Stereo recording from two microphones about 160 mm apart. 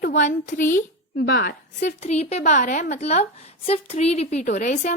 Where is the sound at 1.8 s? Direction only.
45° left (ahead or behind).